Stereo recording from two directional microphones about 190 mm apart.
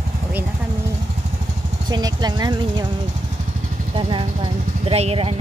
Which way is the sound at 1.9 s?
20° right (ahead or behind).